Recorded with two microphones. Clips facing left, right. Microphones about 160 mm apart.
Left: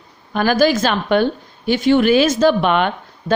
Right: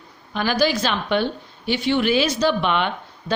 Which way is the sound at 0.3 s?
45° left (ahead or behind).